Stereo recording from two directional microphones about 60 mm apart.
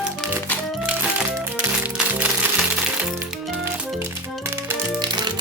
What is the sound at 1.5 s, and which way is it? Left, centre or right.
Music, right.